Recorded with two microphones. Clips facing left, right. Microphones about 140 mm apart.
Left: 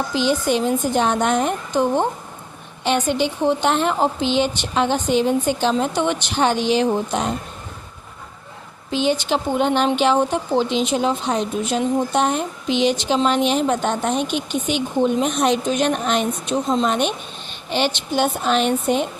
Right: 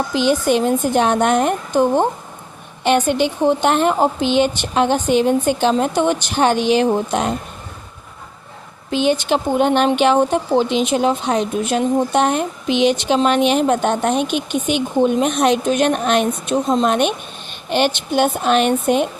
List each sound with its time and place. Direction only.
0.1 s speech: 55° right (ahead or behind)
8.9 s speech: 55° right (ahead or behind)